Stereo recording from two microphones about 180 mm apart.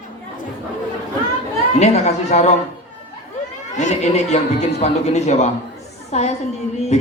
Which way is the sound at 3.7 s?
40° left (ahead or behind).